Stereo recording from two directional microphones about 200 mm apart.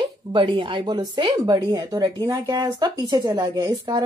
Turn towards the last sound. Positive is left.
turn(degrees=-20)  # may be behind; listen again after turning